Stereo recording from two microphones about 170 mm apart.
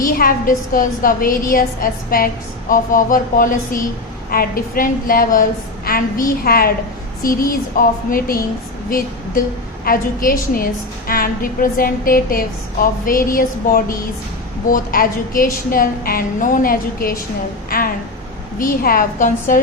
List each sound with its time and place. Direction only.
0.0 s a woman's voice: 60° left (ahead or behind)
17.7 s a sound: 60° left (ahead or behind)
18.6 s a woman's voice: 55° left (ahead or behind)